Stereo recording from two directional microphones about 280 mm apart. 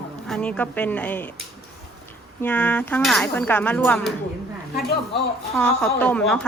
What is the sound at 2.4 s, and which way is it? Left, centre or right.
Speech, centre.